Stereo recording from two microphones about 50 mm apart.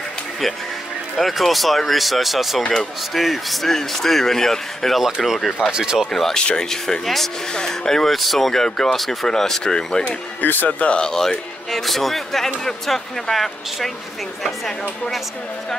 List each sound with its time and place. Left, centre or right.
1.1 s speech: centre
5.0 s speech: centre
5.7 s speech: centre
6.3 s speech: centre
10.4 s speech: left
10.9 s speech: centre